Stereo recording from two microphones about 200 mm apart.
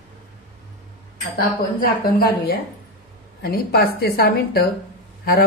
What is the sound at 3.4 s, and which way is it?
A woman's voice, 50° left (ahead or behind).